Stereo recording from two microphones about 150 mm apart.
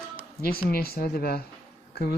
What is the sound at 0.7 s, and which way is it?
Speech, 90° left.